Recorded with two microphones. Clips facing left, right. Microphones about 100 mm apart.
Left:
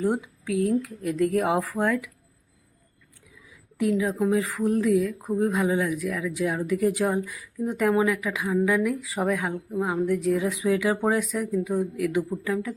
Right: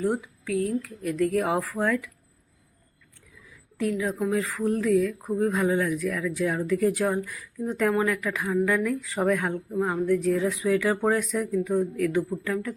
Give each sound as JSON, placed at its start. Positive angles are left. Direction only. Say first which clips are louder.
{"t": 0.0, "sound": "speech", "louder": "left 1 dB", "side_deg": 20}
{"t": 3.8, "sound": "speech", "louder": "left 3 dB", "side_deg": 15}